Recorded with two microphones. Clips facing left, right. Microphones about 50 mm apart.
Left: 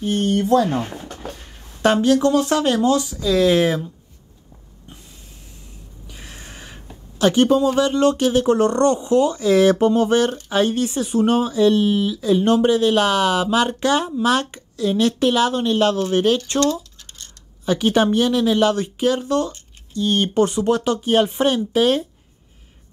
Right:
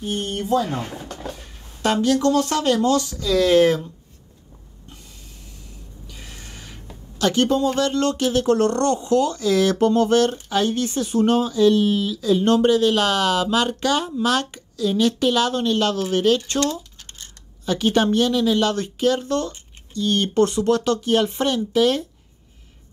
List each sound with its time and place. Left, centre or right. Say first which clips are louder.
0.0 s speech: left 6 dB; left
1.8 s speech: left 3 dB; left
6.0 s a sound: left 2 dB; left
7.2 s speech: left 4 dB; left